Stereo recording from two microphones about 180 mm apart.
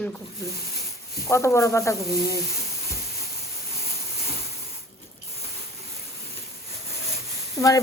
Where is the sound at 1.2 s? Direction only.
15° left (ahead or behind).